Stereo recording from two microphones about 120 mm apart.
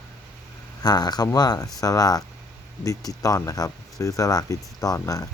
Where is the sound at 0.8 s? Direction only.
35° left (ahead or behind).